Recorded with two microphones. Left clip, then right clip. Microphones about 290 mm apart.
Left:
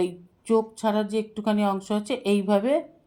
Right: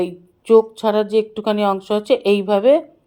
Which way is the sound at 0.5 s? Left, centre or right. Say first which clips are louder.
Right 10 dB; centre.